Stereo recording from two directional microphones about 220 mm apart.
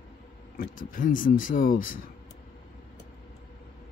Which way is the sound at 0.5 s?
40° left (ahead or behind).